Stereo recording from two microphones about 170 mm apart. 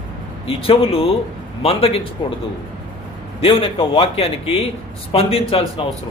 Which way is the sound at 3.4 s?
35° left (ahead or behind).